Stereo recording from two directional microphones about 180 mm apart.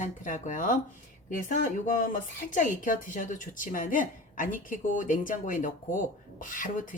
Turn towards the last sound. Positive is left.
turn(degrees=45)  # may be behind; listen again after turning